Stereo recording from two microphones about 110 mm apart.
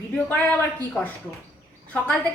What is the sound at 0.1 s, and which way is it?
A woman's voice, 10° left (ahead or behind).